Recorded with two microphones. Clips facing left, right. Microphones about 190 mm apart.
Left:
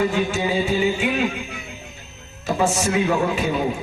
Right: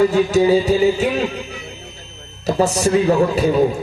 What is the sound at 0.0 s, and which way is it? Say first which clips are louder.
A man's voice: right 7 dB; 40° right (ahead or behind).